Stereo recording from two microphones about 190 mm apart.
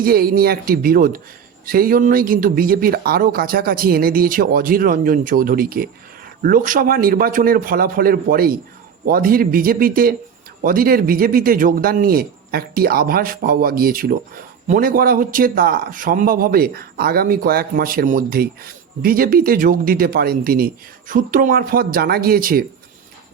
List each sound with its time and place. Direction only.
0.0 s a man's voice: 50° right (ahead or behind)